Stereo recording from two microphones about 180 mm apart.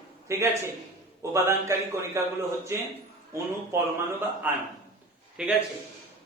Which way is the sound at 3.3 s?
15° right (ahead or behind).